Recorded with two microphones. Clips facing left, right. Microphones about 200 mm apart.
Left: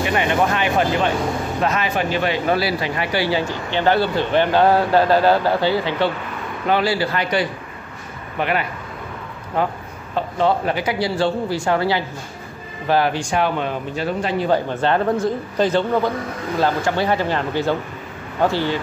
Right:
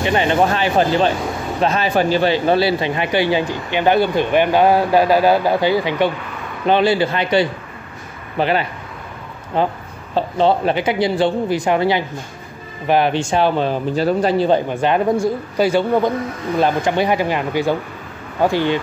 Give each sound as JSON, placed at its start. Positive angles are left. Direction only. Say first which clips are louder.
{"t": 0.0, "sound": "speech", "louder": "right 3 dB", "side_deg": -30}
{"t": 14.5, "sound": "speech", "louder": "right 2 dB", "side_deg": -15}